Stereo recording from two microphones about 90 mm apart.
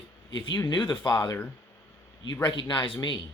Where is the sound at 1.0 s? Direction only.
45° left (ahead or behind).